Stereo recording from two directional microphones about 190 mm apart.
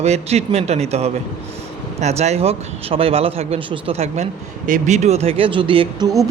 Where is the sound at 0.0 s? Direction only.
35° right (ahead or behind).